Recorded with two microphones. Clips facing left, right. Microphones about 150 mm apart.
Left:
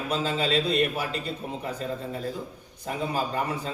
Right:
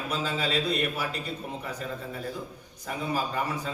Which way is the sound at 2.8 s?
35° left (ahead or behind).